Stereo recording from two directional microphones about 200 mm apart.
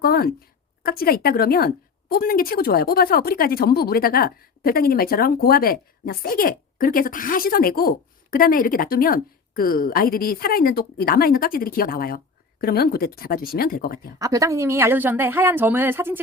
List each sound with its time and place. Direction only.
0.0 s a woman's voice: 50° left (ahead or behind)
14.2 s speech: 15° right (ahead or behind)